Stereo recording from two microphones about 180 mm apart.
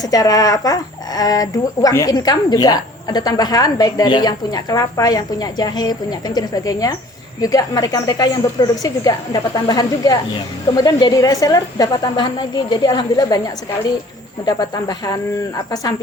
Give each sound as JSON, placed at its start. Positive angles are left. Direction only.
{"t": 0.0, "sound": "speech", "side_deg": 20}